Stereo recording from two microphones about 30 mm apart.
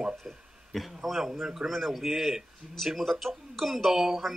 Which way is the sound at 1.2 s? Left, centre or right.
Centre.